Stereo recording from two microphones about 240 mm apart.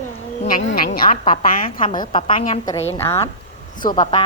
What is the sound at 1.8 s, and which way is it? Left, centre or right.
Speech, centre.